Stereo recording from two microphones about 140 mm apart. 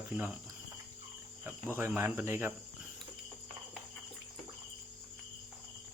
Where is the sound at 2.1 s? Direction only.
10° right (ahead or behind).